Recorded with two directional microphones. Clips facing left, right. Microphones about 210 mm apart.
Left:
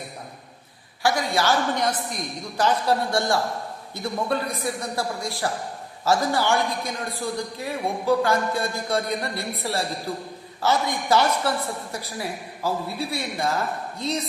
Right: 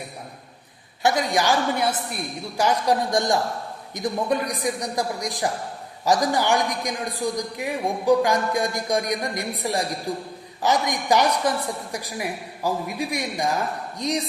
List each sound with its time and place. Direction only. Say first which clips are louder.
1.0 s a man's voice: right 1 dB; 20° right (ahead or behind)